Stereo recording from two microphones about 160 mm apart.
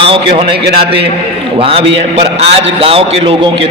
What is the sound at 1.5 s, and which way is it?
A man's voice, 35° right (ahead or behind).